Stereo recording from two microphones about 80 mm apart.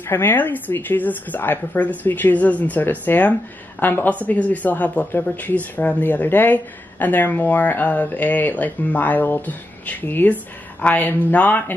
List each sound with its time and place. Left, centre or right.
0.1 s speech: left